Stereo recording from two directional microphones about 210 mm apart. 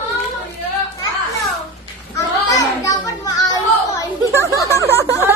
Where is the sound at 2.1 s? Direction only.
15° left (ahead or behind).